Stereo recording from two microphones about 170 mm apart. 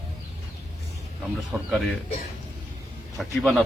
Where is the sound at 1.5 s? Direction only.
15° right (ahead or behind).